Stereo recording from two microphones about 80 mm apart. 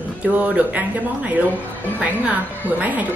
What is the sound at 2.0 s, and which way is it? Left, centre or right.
A woman's voice, centre.